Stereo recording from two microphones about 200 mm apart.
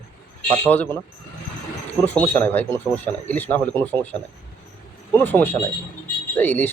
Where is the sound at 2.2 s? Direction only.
10° left (ahead or behind).